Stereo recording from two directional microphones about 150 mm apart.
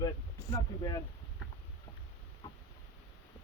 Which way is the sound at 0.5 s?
25° left (ahead or behind).